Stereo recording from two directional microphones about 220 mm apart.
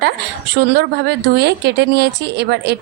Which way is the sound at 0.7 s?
50° right (ahead or behind).